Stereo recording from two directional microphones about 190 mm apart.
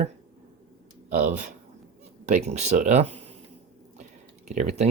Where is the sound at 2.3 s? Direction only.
35° right (ahead or behind).